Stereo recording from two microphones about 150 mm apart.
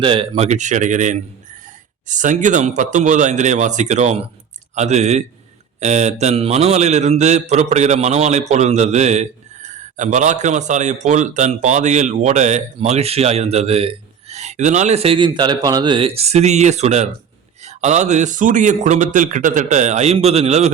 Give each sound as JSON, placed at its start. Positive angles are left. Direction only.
{"t": 0.0, "sound": "speech", "side_deg": -35}